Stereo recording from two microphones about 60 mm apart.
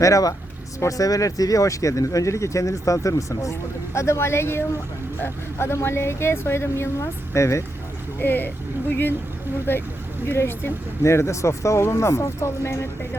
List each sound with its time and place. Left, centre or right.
0.0 s speech: left
3.9 s speech: left
8.2 s speech: left
10.2 s speech: left